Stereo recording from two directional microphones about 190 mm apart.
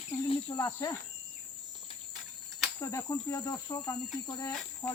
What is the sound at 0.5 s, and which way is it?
Speech, 15° left (ahead or behind).